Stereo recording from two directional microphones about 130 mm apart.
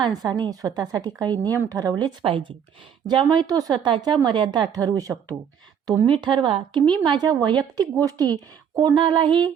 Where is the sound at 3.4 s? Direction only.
30° right (ahead or behind).